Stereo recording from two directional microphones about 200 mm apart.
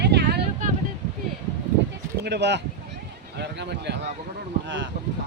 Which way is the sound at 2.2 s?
60° right (ahead or behind).